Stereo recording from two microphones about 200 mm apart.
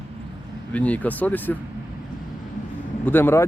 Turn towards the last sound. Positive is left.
turn(degrees=10)  # may be behind; listen again after turning